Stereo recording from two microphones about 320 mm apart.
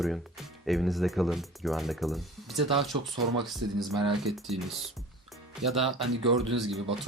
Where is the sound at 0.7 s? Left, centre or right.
Centre.